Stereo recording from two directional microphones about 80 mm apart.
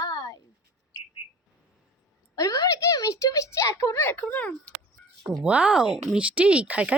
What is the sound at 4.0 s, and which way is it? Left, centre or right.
Speech, left.